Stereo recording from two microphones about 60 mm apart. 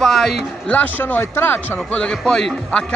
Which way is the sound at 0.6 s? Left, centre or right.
Left.